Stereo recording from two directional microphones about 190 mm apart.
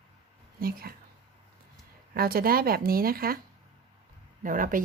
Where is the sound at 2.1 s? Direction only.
50° right (ahead or behind).